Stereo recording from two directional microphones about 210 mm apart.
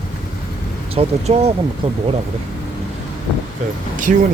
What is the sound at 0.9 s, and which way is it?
Speech, 30° right (ahead or behind).